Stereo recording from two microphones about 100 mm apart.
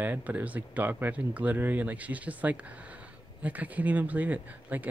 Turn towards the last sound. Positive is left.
turn(degrees=-15)  # may be behind; listen again after turning